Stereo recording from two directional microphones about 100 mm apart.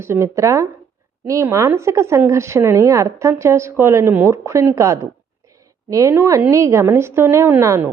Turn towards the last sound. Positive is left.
turn(degrees=-25)  # may be behind; listen again after turning